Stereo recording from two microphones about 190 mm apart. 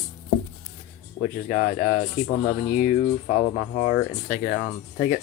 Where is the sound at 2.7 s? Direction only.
45° left (ahead or behind).